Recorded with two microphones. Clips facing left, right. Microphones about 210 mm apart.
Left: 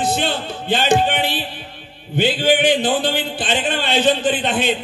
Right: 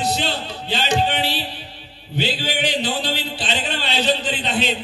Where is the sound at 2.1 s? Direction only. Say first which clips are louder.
Left 7 dB; 50° left (ahead or behind).